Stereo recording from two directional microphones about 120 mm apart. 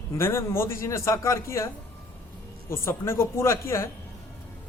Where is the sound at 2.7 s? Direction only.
20° left (ahead or behind).